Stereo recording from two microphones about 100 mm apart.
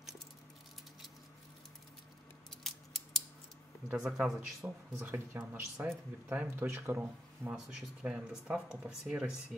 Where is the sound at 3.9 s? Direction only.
10° right (ahead or behind).